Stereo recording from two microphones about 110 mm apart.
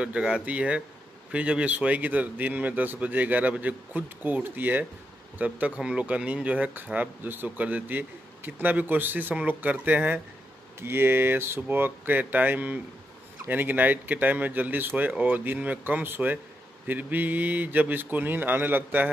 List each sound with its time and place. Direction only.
0.0 s speech: 10° right (ahead or behind)